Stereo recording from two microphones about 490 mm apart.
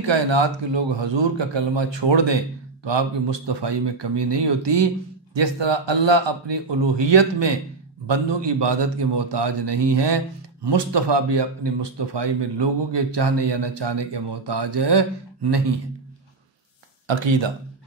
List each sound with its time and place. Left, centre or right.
0.0 s a man's voice: right
17.1 s a man's voice: right